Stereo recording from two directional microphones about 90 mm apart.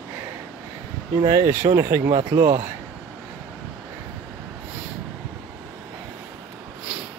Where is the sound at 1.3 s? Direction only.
35° right (ahead or behind).